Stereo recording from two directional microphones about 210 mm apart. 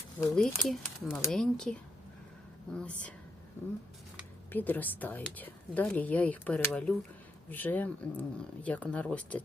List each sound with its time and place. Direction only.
0.2 s speech: 5° left (ahead or behind)
4.5 s a woman's voice: 10° left (ahead or behind)